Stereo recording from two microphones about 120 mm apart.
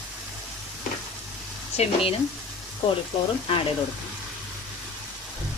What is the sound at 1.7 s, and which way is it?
Speech, 60° left (ahead or behind).